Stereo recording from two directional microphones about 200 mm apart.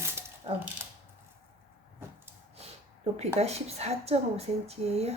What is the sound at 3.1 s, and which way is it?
A woman's voice, 30° right (ahead or behind).